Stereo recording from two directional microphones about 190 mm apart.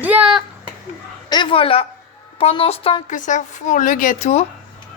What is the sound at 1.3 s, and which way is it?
A woman's voice, 25° left (ahead or behind).